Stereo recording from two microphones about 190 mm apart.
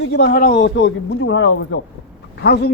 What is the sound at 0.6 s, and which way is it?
Speech, 75° left (ahead or behind).